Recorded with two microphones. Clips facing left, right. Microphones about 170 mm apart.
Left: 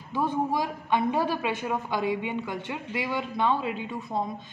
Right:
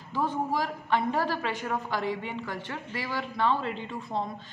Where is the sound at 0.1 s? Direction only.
15° left (ahead or behind).